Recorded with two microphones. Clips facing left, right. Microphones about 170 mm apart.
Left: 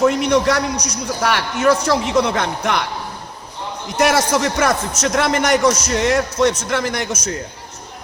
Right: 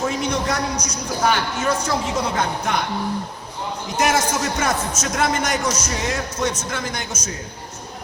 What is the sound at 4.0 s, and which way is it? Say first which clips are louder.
A man's voice: left 4 dB; 70° left (ahead or behind).